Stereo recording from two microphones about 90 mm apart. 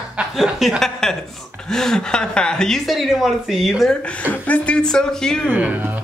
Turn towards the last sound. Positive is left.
turn(degrees=-20)  # may be behind; listen again after turning